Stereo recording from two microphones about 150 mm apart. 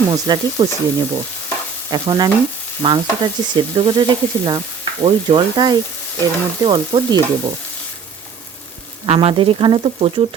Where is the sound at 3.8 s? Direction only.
30° right (ahead or behind).